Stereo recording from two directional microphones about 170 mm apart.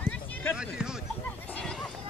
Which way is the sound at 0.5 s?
5° right (ahead or behind).